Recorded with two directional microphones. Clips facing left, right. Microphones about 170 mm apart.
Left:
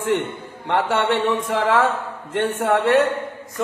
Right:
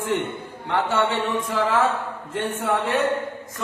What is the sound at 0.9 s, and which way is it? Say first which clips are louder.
Speech: left 3 dB; 70° left (ahead or behind).